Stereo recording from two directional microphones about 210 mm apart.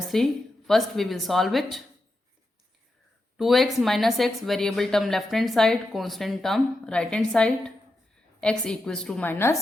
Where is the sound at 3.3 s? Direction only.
Centre (ahead or behind).